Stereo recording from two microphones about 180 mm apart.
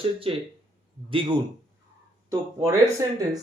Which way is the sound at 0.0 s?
30° right (ahead or behind).